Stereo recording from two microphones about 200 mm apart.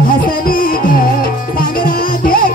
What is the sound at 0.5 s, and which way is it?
Music, 45° left (ahead or behind).